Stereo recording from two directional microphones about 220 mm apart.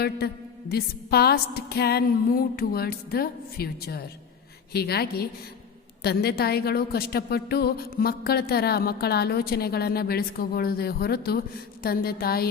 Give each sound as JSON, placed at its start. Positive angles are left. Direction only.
{"t": 0.7, "sound": "a woman's voice", "side_deg": 45}